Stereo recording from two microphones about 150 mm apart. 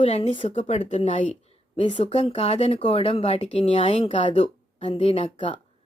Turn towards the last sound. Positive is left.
turn(degrees=40)  # may be behind; listen again after turning